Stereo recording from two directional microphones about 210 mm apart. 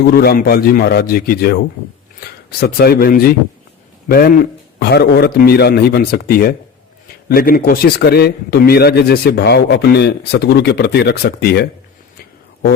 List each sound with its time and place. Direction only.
0.0 s a man's voice: 50° left (ahead or behind)